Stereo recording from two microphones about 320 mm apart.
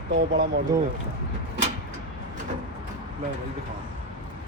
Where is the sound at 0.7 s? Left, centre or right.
Centre.